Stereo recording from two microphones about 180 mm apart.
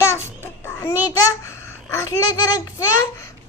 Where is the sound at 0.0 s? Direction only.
15° left (ahead or behind).